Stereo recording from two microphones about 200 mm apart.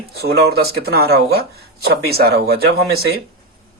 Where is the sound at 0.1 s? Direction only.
50° right (ahead or behind).